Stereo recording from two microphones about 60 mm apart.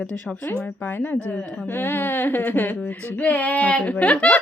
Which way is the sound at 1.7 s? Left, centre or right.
Left.